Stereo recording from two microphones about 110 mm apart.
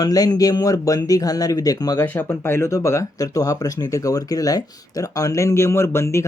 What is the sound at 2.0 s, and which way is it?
Speech, 20° left (ahead or behind).